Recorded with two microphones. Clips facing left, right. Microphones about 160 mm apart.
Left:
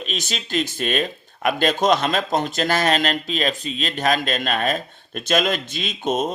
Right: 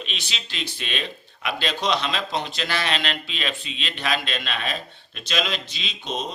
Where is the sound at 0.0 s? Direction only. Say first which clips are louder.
Left 7 dB; 45° left (ahead or behind).